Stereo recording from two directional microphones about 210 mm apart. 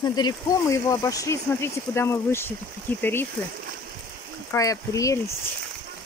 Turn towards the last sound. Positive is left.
turn(degrees=15)  # may be behind; listen again after turning